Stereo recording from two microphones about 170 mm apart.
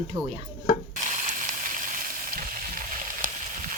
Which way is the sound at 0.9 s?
45° right (ahead or behind).